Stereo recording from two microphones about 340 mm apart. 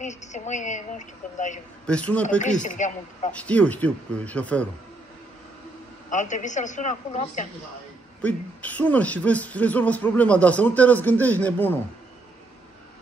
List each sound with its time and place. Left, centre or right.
0.0 s a woman's voice: left
1.9 s a man's voice: centre
2.2 s a woman's voice: left
3.3 s a man's voice: centre
6.0 s a woman's voice: left
8.2 s a man's voice: centre